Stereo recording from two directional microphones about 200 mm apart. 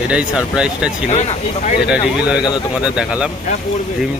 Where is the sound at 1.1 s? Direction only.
35° left (ahead or behind).